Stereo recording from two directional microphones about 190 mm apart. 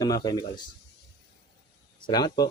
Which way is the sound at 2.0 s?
20° left (ahead or behind).